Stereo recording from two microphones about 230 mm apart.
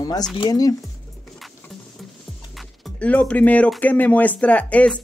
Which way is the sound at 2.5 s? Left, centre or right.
Centre.